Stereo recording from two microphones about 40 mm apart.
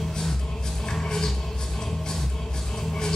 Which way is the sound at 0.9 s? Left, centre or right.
Centre.